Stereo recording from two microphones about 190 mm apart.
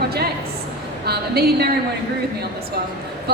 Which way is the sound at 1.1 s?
55° right (ahead or behind).